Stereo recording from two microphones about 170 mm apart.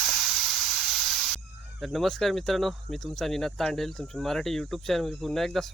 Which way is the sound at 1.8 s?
Centre (ahead or behind).